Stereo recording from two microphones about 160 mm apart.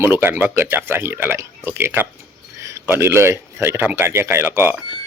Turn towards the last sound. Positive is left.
turn(degrees=-15)  # may be behind; listen again after turning